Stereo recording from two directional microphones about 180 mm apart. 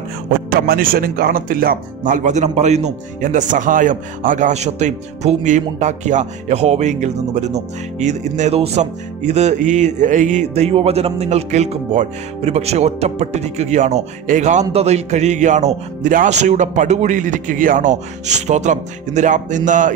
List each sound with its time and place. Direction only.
0.5 s speech: 55° right (ahead or behind)